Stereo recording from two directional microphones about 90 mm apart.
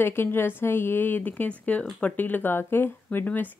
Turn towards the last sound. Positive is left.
turn(degrees=20)  # may be behind; listen again after turning